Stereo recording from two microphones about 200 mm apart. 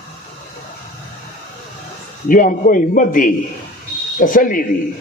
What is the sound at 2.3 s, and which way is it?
A man's voice, 45° left (ahead or behind).